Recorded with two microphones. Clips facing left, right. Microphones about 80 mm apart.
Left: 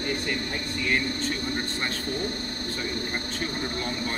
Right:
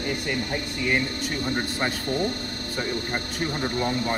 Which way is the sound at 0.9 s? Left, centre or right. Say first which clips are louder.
Right 1 dB; centre.